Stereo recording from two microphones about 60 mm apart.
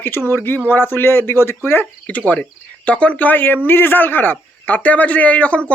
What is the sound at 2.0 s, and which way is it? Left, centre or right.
Speech, left.